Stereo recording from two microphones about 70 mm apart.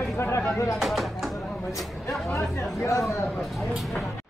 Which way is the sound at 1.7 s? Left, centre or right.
Centre.